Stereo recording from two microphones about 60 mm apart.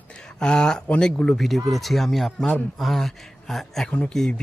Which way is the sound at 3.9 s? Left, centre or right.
Centre.